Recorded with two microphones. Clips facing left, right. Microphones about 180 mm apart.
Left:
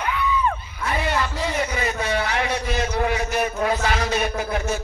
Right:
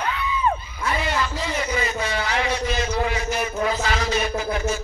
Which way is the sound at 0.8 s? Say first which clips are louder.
Left 1 dB; 60° left (ahead or behind).